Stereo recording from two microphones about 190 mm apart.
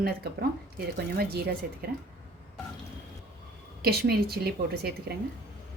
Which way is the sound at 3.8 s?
55° right (ahead or behind).